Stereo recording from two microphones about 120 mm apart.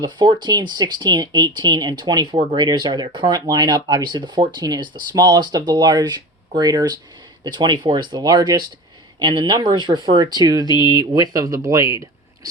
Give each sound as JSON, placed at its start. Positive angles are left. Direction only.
{"t": 0.0, "sound": "speech", "side_deg": -40}
{"t": 2.3, "sound": "speech", "side_deg": -60}
{"t": 2.6, "sound": "speech", "side_deg": -40}